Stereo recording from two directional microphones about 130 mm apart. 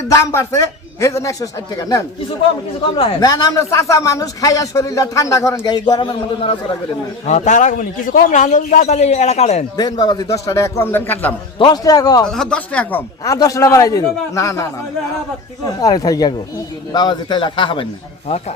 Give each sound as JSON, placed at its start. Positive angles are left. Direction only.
{"t": 0.1, "sound": "speech", "side_deg": 25}
{"t": 3.2, "sound": "speech", "side_deg": 30}
{"t": 7.3, "sound": "a man's voice", "side_deg": 65}
{"t": 9.7, "sound": "speech", "side_deg": 30}
{"t": 11.6, "sound": "speech", "side_deg": 30}
{"t": 12.2, "sound": "speech", "side_deg": 5}
{"t": 13.2, "sound": "speech", "side_deg": 25}
{"t": 15.8, "sound": "a man's voice", "side_deg": 30}
{"t": 18.3, "sound": "speech", "side_deg": 55}